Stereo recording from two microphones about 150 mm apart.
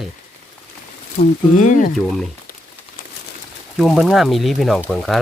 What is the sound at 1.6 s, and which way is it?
Speech, 60° left (ahead or behind).